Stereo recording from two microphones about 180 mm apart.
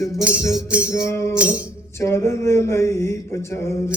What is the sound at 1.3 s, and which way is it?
Music, 5° right (ahead or behind).